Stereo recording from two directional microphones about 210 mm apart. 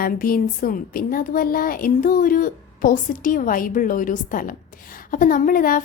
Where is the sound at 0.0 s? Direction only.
45° left (ahead or behind).